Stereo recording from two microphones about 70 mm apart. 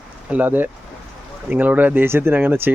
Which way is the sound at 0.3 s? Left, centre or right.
Right.